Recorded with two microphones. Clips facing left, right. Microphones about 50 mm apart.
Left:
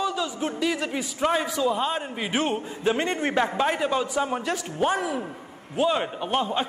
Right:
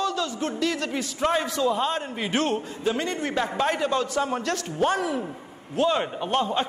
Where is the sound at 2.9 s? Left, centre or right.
Left.